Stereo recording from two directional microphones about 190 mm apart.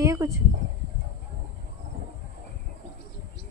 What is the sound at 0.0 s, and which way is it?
Insect, 15° right (ahead or behind).